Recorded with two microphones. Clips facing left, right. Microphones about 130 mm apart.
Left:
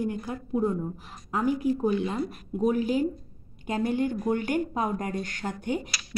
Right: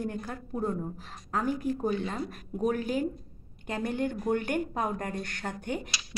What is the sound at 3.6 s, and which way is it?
Speech, 10° left (ahead or behind).